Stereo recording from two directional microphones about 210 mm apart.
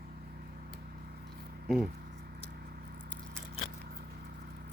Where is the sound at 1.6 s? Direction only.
5° right (ahead or behind).